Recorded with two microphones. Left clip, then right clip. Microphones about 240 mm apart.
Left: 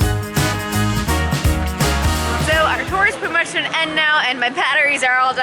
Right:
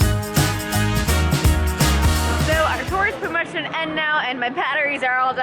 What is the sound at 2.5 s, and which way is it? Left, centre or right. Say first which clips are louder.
Speech: left 4 dB; centre.